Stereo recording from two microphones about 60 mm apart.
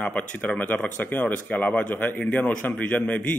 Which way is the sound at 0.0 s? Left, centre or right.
Centre.